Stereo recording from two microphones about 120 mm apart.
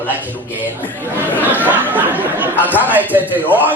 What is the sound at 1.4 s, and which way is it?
A man's voice, 15° right (ahead or behind).